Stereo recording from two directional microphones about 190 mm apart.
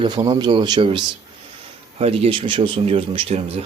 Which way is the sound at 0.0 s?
25° right (ahead or behind).